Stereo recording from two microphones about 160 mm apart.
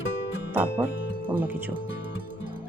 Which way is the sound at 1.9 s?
65° right (ahead or behind).